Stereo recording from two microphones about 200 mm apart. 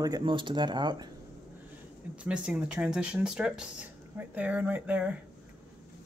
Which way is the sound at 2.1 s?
5° right (ahead or behind).